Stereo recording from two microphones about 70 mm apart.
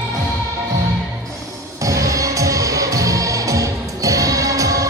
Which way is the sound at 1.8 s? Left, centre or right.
Right.